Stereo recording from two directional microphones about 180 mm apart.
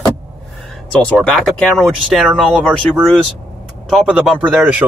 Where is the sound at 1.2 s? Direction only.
Centre (ahead or behind).